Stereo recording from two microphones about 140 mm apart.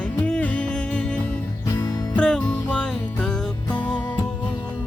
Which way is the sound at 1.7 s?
25° left (ahead or behind).